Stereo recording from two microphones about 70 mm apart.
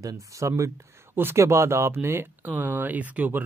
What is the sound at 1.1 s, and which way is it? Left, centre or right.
Speech, right.